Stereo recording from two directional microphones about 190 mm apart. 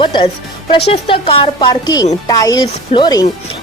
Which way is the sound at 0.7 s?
30° left (ahead or behind).